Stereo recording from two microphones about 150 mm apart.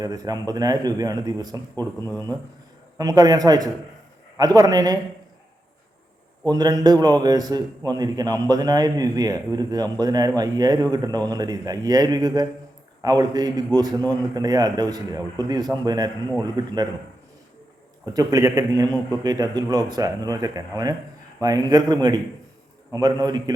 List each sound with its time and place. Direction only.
0.0 s a man's voice: 25° right (ahead or behind)
6.5 s a man's voice: 25° right (ahead or behind)
18.0 s a man's voice: 25° right (ahead or behind)